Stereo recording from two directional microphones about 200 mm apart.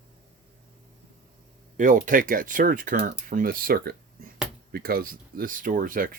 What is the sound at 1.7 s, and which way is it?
Speech, 40° right (ahead or behind).